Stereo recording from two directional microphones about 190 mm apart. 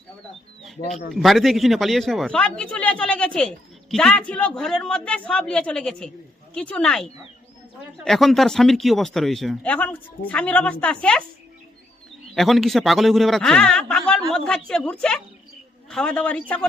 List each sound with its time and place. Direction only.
1.1 s speech: centre (ahead or behind)
12.3 s a man's voice: centre (ahead or behind)